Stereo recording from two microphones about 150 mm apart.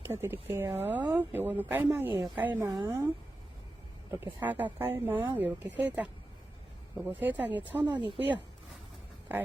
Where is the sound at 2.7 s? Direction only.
25° right (ahead or behind).